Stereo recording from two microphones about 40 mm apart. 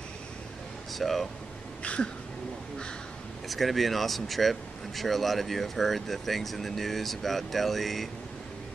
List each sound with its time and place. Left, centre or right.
0.9 s speech: centre
1.8 s a sound: left
3.4 s speech: centre